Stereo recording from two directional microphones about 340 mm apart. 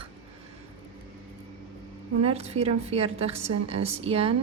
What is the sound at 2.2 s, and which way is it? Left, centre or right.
Speech, centre.